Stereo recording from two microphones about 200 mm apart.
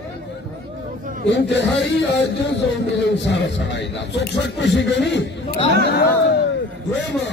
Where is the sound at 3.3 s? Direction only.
65° left (ahead or behind).